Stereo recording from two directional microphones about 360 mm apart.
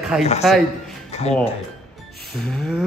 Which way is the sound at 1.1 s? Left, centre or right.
Centre.